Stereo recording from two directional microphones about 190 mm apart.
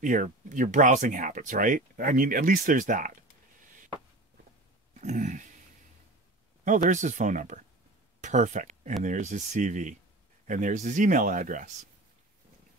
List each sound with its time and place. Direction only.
0.0 s speech: 45° right (ahead or behind)
5.0 s dog: 40° right (ahead or behind)
6.6 s speech: 40° right (ahead or behind)